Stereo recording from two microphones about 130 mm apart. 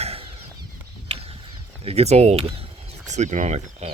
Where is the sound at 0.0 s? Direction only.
50° right (ahead or behind).